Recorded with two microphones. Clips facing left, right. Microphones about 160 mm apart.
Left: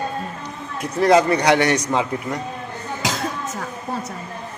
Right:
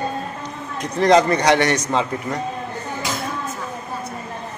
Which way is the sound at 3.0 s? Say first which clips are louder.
Left 2 dB; 90° left.